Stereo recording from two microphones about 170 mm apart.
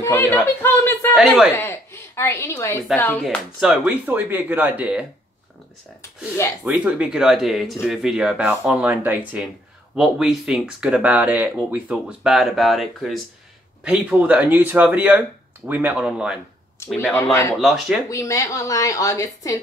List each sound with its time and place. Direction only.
0.0 s speech: 15° left (ahead or behind)
1.1 s speech: centre (ahead or behind)
1.6 s a sound: 15° left (ahead or behind)
3.0 s speech: 10° left (ahead or behind)
3.6 s speech: 5° right (ahead or behind)
6.6 s speech: 10° right (ahead or behind)
17.1 s speech: 15° left (ahead or behind)
17.6 s speech: centre (ahead or behind)
18.0 s a woman's voice: 20° left (ahead or behind)